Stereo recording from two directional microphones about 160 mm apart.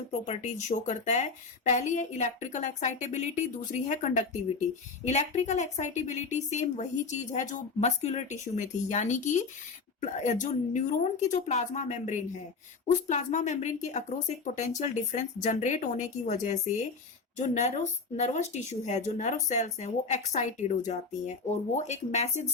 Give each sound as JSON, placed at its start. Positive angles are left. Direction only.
{"t": 0.3, "sound": "speech", "side_deg": 45}